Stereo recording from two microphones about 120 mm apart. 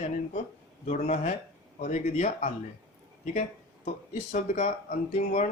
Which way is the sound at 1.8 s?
85° left.